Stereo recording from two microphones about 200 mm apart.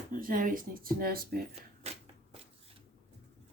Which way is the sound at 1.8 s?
30° right (ahead or behind).